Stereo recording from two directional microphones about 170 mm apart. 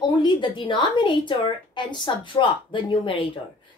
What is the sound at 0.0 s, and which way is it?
A woman's voice, 25° left (ahead or behind).